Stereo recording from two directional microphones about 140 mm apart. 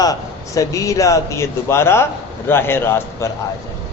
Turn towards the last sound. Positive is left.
turn(degrees=15)  # may be behind; listen again after turning